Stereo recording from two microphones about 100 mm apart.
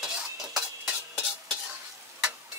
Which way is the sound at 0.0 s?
5° right (ahead or behind).